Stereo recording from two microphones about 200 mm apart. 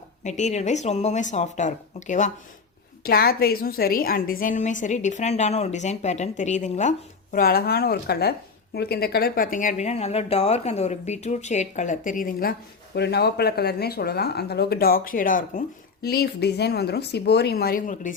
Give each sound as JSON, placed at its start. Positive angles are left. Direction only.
{"t": 0.3, "sound": "speech", "side_deg": 35}
{"t": 3.0, "sound": "a woman's voice", "side_deg": 50}